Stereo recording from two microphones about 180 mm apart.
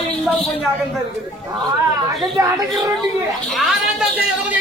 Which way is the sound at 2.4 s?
20° right (ahead or behind).